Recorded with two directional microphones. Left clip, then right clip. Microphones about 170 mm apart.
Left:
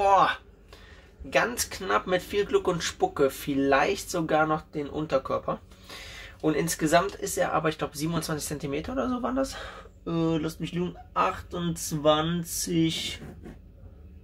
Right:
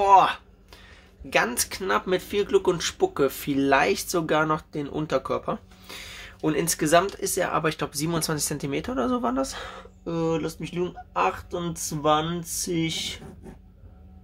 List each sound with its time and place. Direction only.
0.0 s speech: 25° right (ahead or behind)
1.3 s speech: 25° right (ahead or behind)